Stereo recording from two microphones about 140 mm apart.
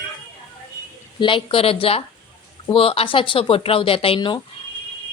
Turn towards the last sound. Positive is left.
turn(degrees=40)  # may be behind; listen again after turning